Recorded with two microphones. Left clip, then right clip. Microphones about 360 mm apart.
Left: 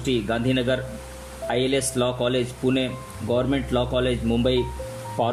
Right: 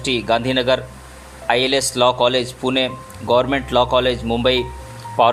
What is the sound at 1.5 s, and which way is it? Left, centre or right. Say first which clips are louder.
Speech: right 6 dB; centre.